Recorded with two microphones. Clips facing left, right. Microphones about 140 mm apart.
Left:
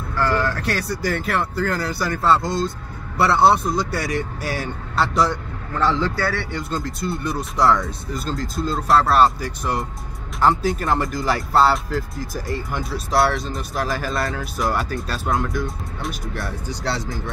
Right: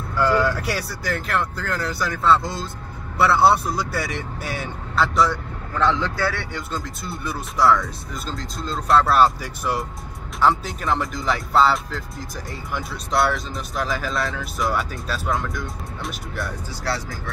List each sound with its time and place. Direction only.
0.2 s vehicle: 10° right (ahead or behind)
1.0 s speech: centre (ahead or behind)
16.8 s speech: 25° left (ahead or behind)